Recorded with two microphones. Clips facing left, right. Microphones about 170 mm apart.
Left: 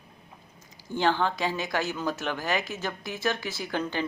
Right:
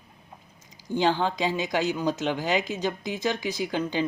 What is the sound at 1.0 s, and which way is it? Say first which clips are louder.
Speech: right 1 dB; 15° right (ahead or behind).